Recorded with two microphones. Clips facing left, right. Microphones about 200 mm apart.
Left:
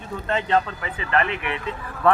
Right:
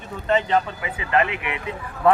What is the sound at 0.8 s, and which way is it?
Speech, 20° right (ahead or behind).